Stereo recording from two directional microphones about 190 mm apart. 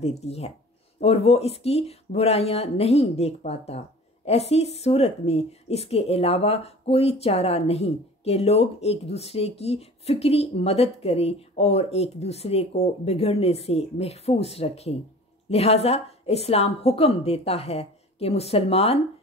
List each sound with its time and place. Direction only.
0.0 s speech: 35° left (ahead or behind)